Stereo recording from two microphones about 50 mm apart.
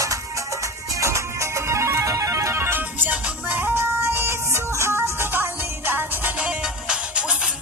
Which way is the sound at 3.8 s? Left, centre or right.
Right.